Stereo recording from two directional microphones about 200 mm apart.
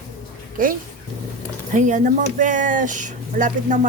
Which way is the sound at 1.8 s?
40° right (ahead or behind).